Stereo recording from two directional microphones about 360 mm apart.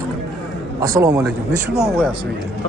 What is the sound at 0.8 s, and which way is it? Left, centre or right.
Speech, centre.